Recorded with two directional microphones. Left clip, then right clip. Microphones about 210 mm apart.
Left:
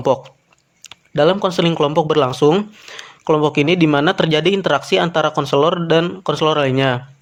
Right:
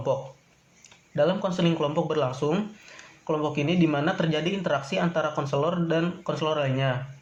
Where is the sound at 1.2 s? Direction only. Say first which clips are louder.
Left 10 dB; 50° left (ahead or behind).